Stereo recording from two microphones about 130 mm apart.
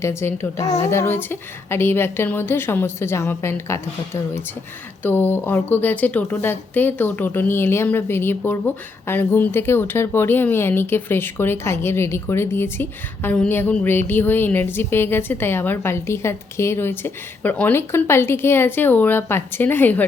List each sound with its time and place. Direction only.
0.0 s a woman's voice: 20° left (ahead or behind)